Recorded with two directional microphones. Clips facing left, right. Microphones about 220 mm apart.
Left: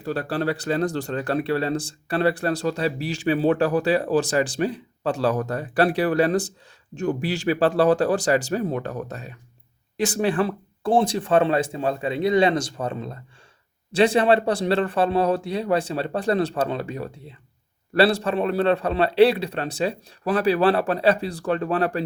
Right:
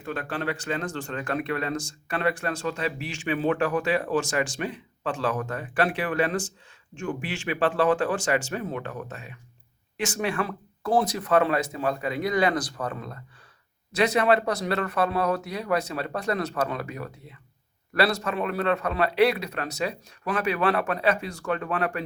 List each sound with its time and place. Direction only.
0.0 s speech: 35° left (ahead or behind)